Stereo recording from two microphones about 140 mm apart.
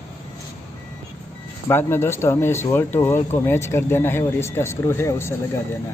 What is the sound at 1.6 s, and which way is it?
Speech, 15° left (ahead or behind).